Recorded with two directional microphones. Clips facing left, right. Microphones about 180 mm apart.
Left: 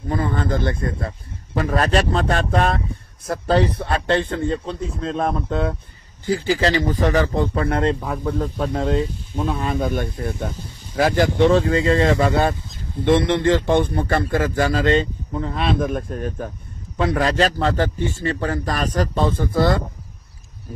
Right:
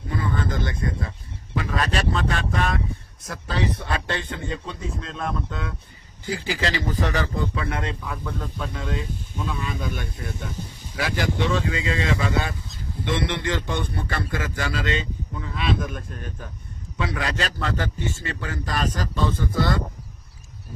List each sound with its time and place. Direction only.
0.1 s speech: 50° left (ahead or behind)
5.0 s speech: 45° left (ahead or behind)
7.3 s speech: 50° left (ahead or behind)